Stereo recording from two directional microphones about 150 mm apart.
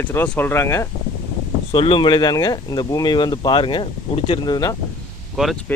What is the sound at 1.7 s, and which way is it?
Speech, 35° left (ahead or behind).